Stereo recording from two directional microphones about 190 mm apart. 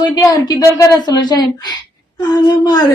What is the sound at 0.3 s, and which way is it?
Speech, 20° left (ahead or behind).